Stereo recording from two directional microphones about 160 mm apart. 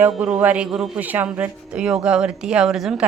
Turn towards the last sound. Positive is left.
turn(degrees=-5)  # may be behind; listen again after turning